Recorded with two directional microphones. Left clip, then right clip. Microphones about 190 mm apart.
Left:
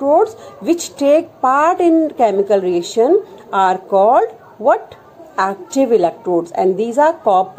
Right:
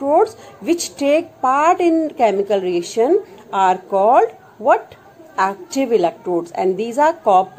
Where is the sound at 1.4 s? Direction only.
35° left (ahead or behind).